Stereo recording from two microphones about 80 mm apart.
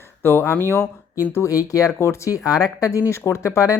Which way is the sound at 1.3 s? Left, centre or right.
Left.